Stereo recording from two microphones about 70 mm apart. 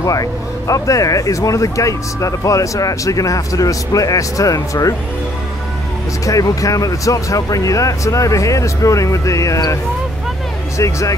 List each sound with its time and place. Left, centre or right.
0.0 s speech: left
6.2 s speech: left
10.8 s speech: left